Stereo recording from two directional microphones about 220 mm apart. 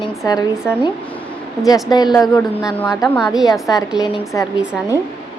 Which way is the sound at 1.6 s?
15° left (ahead or behind).